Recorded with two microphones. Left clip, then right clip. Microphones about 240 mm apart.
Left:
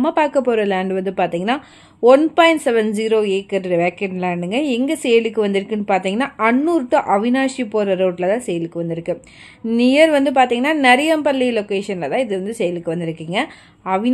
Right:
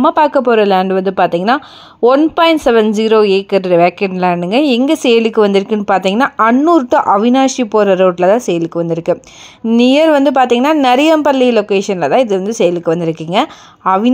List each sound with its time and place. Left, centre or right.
0.0 s a woman's voice: centre